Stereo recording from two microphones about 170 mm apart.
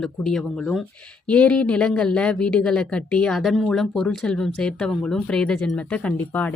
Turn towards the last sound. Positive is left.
turn(degrees=10)  # may be behind; listen again after turning